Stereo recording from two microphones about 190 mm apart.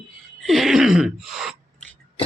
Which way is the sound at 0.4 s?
Centre (ahead or behind).